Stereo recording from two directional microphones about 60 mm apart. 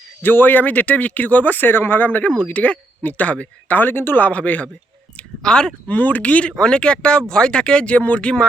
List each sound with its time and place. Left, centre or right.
0.2 s speech: left
4.3 s speech: left
5.4 s speech: centre
5.9 s speech: left